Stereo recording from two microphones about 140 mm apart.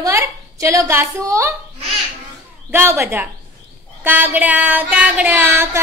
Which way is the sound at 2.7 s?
20° right (ahead or behind).